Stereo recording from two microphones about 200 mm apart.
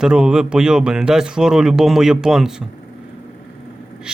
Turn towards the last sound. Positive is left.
turn(degrees=-5)  # may be behind; listen again after turning